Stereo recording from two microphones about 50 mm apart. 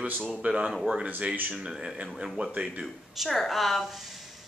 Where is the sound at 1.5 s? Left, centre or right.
Centre.